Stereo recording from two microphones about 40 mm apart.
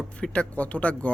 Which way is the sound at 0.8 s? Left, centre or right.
Left.